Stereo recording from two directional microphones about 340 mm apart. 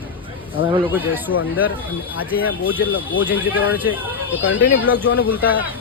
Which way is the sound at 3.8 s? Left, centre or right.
Centre.